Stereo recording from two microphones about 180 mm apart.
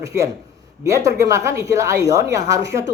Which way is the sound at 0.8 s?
15° right (ahead or behind).